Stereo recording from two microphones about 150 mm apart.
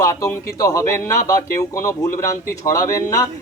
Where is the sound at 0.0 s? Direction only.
20° left (ahead or behind).